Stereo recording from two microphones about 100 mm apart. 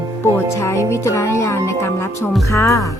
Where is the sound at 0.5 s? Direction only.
30° left (ahead or behind).